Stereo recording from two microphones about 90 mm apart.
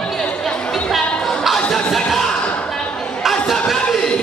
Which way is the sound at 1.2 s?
Centre (ahead or behind).